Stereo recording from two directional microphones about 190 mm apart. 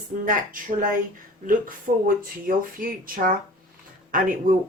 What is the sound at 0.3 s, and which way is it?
A woman's voice, 45° right (ahead or behind).